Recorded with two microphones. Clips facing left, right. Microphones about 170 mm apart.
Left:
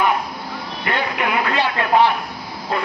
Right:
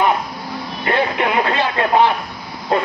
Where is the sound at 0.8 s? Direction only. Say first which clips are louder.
Right 4 dB; 30° right (ahead or behind).